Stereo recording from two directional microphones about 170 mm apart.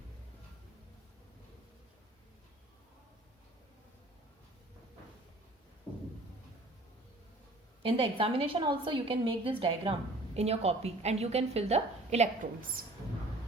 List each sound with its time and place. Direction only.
7.8 s a woman's voice: 30° right (ahead or behind)